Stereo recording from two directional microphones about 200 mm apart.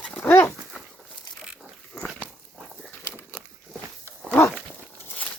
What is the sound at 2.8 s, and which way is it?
Crumpling, 10° left (ahead or behind).